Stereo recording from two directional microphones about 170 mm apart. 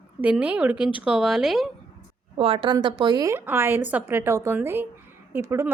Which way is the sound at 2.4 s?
30° right (ahead or behind).